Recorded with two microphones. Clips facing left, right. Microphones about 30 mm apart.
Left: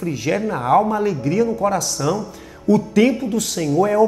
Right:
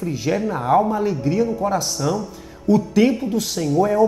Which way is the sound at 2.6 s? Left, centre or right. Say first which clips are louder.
Left 1 dB; left.